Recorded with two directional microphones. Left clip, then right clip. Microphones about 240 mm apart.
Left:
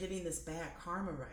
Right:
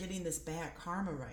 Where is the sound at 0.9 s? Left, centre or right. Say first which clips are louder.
Right 1 dB; right.